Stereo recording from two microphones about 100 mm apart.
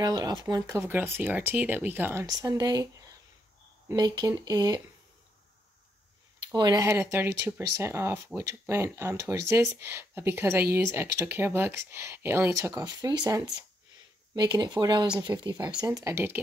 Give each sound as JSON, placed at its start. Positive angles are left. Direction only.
{"t": 0.0, "sound": "speech", "side_deg": -40}
{"t": 0.7, "sound": "speech", "side_deg": -30}
{"t": 2.2, "sound": "speech", "side_deg": -35}
{"t": 3.9, "sound": "speech", "side_deg": -45}
{"t": 6.5, "sound": "speech", "side_deg": -45}
{"t": 6.8, "sound": "speech", "side_deg": -25}
{"t": 12.5, "sound": "speech", "side_deg": -35}